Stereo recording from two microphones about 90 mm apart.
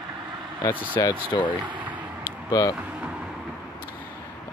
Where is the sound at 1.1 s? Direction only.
60° left (ahead or behind).